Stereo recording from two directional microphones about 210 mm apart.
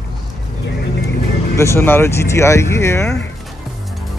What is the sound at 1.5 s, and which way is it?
Speech, 15° left (ahead or behind).